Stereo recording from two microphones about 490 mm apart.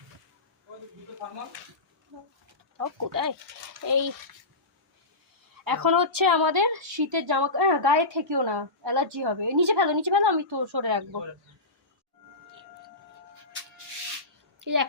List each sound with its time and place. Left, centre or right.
2.7 s speech: right
5.6 s speech: right
14.6 s a woman's voice: right